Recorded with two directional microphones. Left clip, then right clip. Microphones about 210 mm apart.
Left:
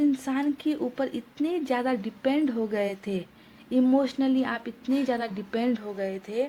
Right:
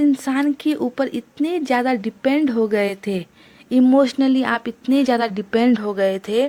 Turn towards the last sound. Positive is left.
turn(degrees=-45)  # may be behind; listen again after turning